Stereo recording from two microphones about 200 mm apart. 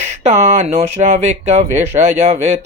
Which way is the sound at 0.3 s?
35° right (ahead or behind).